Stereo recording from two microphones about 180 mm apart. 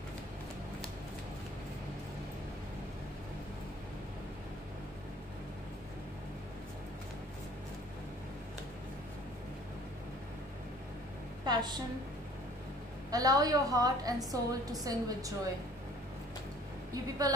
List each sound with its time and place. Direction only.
11.4 s a woman's voice: 25° right (ahead or behind)
13.1 s a woman's voice: 20° right (ahead or behind)